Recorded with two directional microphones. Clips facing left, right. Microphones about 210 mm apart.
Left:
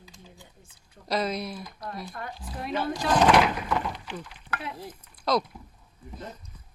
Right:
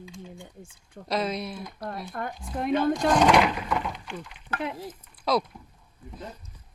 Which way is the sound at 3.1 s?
5° left (ahead or behind).